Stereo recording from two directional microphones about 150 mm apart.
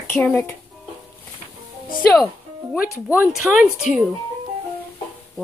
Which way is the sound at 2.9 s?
15° right (ahead or behind).